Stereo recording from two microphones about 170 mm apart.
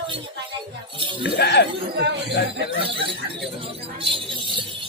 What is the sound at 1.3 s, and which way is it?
Speech, 80° left.